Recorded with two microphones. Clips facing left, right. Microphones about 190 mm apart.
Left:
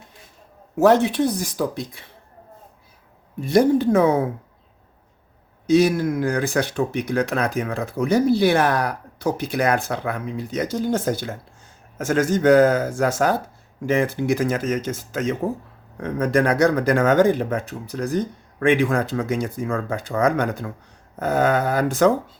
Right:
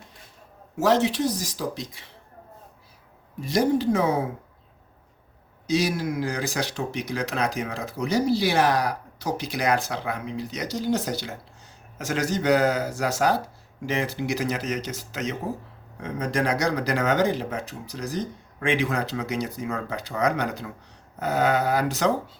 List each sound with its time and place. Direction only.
0.8 s speech: 55° left (ahead or behind)
3.4 s speech: 55° left (ahead or behind)
5.6 s speech: 55° left (ahead or behind)